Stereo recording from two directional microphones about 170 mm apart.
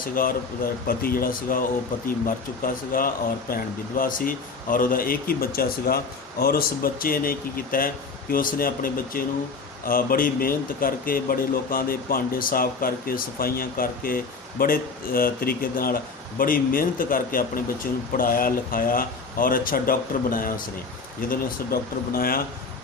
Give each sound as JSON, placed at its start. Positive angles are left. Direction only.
{"t": 0.1, "sound": "speech", "side_deg": 55}